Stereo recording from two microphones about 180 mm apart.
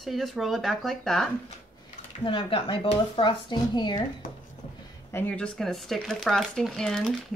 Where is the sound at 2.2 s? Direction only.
30° left (ahead or behind).